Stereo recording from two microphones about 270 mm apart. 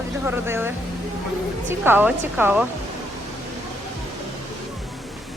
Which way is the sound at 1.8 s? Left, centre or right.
Centre.